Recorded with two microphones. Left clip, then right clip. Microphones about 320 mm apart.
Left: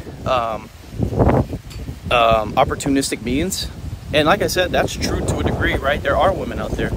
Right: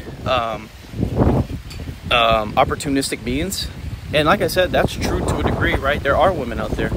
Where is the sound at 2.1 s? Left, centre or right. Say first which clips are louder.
Left 1 dB; centre.